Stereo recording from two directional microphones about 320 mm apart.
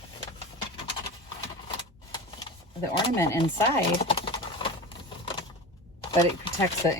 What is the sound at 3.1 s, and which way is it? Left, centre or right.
Speech, centre.